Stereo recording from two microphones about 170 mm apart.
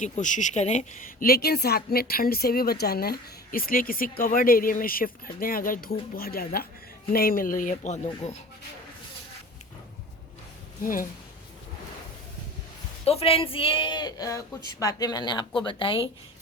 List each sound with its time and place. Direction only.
0.0 s speech: 45° left (ahead or behind)
1.3 s a woman's voice: 70° left (ahead or behind); by 8.4 s 40° left (ahead or behind)
13.1 s speech: 35° left (ahead or behind)